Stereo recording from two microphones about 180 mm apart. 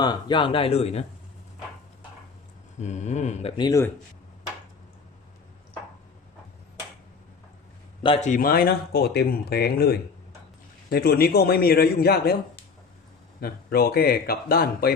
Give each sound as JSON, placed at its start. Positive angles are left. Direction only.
{"t": 0.0, "sound": "speech", "side_deg": 25}
{"t": 2.8, "sound": "speech", "side_deg": 40}
{"t": 3.6, "sound": "speech", "side_deg": 15}
{"t": 8.0, "sound": "speech", "side_deg": 35}
{"t": 13.4, "sound": "speech", "side_deg": 55}